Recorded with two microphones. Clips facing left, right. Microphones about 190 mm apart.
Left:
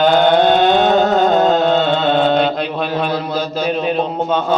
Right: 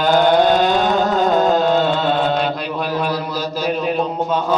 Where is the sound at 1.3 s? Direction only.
25° left (ahead or behind).